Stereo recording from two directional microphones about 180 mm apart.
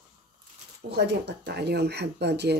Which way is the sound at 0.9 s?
70° right (ahead or behind).